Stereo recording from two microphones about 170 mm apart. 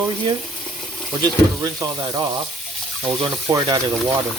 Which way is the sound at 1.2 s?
20° right (ahead or behind).